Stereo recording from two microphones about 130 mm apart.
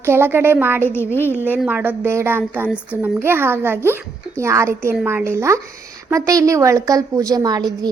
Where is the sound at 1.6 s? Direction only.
10° right (ahead or behind).